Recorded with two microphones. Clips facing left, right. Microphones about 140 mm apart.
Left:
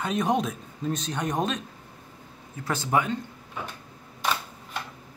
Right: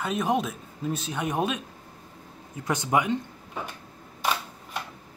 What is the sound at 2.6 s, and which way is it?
Speech, 20° right (ahead or behind).